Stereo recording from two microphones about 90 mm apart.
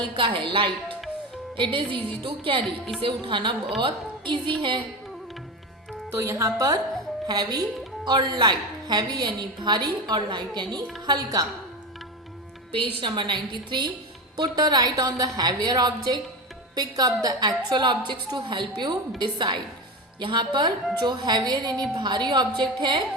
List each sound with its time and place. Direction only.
0.2 s a woman's voice: 70° right (ahead or behind)
6.1 s a woman's voice: 30° right (ahead or behind)
12.7 s a woman's voice: 70° right (ahead or behind); by 23.0 s 55° right (ahead or behind)